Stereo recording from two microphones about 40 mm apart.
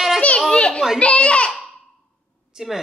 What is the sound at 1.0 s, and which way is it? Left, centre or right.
Speech, left.